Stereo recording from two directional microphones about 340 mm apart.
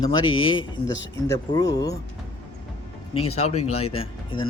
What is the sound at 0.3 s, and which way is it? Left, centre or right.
Speech, left.